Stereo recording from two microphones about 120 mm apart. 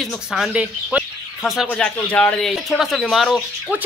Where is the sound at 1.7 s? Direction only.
10° left (ahead or behind).